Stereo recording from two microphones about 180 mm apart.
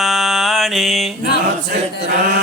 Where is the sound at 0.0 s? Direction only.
Centre (ahead or behind).